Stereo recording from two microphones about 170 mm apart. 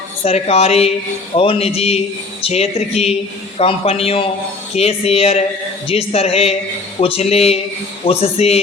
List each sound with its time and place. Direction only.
0.3 s a woman's voice: 40° left (ahead or behind)